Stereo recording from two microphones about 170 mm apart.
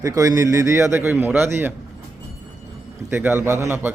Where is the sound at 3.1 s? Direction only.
15° right (ahead or behind).